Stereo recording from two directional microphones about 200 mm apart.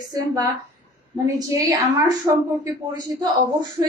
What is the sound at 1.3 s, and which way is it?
A woman's voice, 15° right (ahead or behind).